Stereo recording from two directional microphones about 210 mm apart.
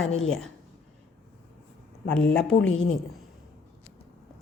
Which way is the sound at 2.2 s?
65° left (ahead or behind).